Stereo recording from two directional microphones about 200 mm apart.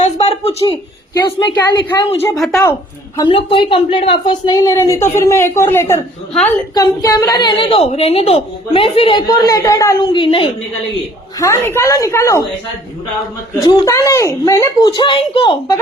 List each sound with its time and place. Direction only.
0.0 s a sound: 30° left (ahead or behind)
1.1 s a woman's voice: 20° left (ahead or behind)
2.2 s a woman's voice: centre (ahead or behind)
3.2 s a woman's voice: 25° left (ahead or behind)
11.3 s speech: 15° left (ahead or behind)
13.7 s speech: 15° left (ahead or behind)